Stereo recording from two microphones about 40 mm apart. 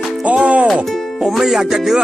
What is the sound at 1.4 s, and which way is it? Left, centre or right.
Music, centre.